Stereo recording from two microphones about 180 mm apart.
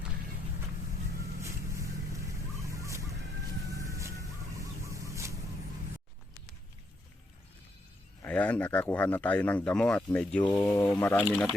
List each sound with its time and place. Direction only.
1.4 s vehicle: 15° right (ahead or behind)
3.9 s a sound: 15° right (ahead or behind)
8.2 s speech: 10° left (ahead or behind)